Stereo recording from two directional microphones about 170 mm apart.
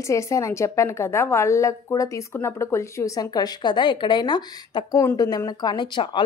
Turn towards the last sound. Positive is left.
turn(degrees=25)  # may be behind; listen again after turning